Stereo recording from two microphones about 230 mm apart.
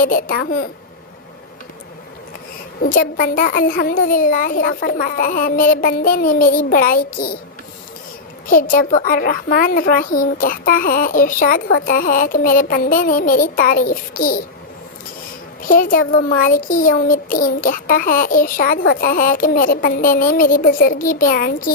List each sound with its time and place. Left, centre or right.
0.0 s a child's voice: left
2.8 s a child's voice: left
8.4 s a child's voice: left
15.6 s a child's voice: left